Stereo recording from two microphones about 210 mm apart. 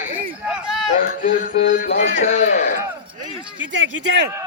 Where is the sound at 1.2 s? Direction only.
40° left (ahead or behind).